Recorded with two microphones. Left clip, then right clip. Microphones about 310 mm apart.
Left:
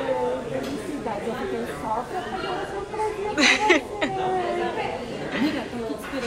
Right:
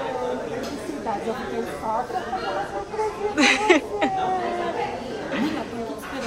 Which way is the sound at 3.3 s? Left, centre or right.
Centre.